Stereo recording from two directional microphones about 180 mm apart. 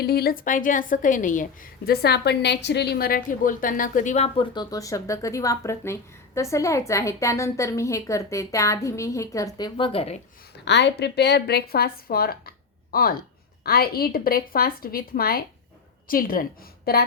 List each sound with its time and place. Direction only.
0.0 s a woman's voice: 60° left (ahead or behind)
1.9 s a woman's voice: 65° left (ahead or behind); by 4.3 s 40° left (ahead or behind)
4.4 s speech: 25° left (ahead or behind)
10.7 s a woman's voice: 75° left (ahead or behind)